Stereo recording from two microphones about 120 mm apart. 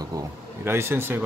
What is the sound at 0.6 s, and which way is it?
Speech, 20° right (ahead or behind).